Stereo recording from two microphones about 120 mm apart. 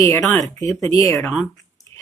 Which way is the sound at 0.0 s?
25° left (ahead or behind).